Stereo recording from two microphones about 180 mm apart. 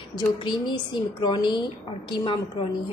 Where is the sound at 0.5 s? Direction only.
25° left (ahead or behind).